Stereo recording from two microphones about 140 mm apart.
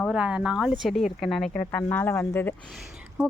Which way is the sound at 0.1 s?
5° right (ahead or behind).